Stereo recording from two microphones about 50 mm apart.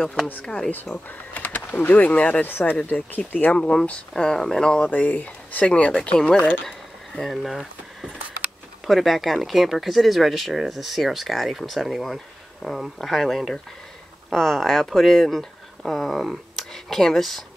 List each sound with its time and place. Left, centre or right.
0.0 s speech: centre
0.7 s speech: left
2.9 s speech: left
3.5 s speech: centre
4.8 s speech: left
5.7 s speech: centre
7.2 s speech: centre